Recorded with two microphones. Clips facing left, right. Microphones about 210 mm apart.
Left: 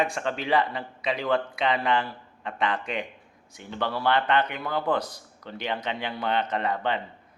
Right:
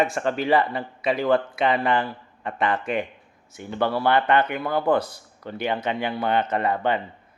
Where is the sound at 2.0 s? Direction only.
55° right (ahead or behind).